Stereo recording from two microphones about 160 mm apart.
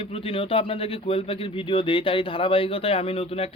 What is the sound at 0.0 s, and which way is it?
Speech, 35° left (ahead or behind).